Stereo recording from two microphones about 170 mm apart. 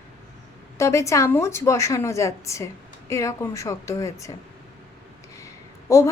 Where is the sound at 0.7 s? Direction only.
15° left (ahead or behind).